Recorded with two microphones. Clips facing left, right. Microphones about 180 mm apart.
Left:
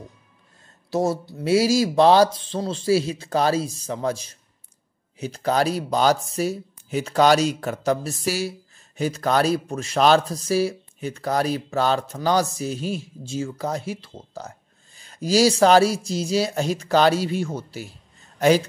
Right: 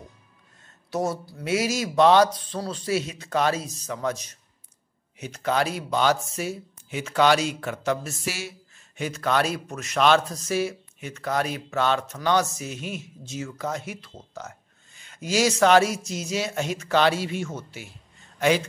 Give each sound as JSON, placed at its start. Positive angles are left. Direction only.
{"t": 0.8, "sound": "speech", "side_deg": 30}